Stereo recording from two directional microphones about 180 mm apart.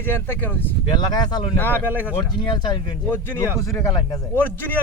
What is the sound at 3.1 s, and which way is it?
Speech, 10° left (ahead or behind).